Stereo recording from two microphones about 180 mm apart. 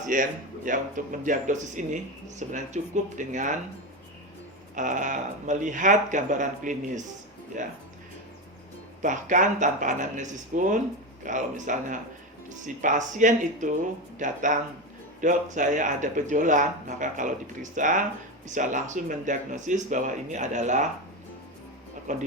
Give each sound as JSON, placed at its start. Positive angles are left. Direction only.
{"t": 0.1, "sound": "speech", "side_deg": -45}
{"t": 4.7, "sound": "speech", "side_deg": -45}
{"t": 9.0, "sound": "speech", "side_deg": -45}
{"t": 22.1, "sound": "speech", "side_deg": -45}